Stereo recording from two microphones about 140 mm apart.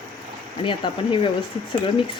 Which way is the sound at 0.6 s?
35° left (ahead or behind).